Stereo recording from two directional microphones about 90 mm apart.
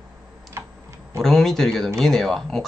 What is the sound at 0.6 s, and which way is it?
Typing, 30° right (ahead or behind).